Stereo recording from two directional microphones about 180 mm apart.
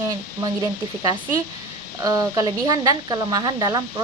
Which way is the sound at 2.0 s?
20° right (ahead or behind).